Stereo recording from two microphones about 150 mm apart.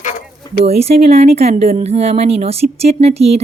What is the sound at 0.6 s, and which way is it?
Speech, 45° right (ahead or behind).